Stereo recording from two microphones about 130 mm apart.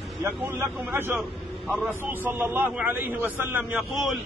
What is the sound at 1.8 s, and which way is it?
A man's voice, 15° right (ahead or behind).